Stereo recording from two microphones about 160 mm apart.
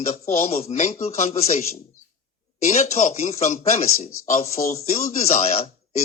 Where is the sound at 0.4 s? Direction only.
45° left (ahead or behind).